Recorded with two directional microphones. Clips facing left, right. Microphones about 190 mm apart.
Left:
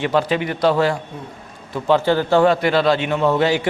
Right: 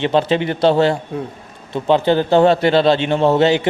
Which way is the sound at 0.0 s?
25° right (ahead or behind).